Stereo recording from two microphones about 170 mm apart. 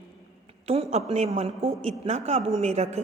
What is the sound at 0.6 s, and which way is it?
A woman's voice, 35° right (ahead or behind).